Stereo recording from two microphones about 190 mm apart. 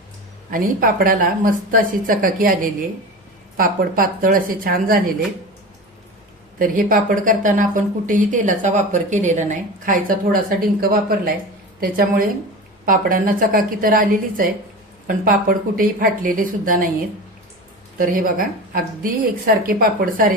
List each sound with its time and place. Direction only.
0.5 s a woman's voice: 50° right (ahead or behind)
3.6 s a woman's voice: 50° right (ahead or behind)
6.6 s a woman's voice: 45° right (ahead or behind)
17.9 s a woman's voice: 45° right (ahead or behind)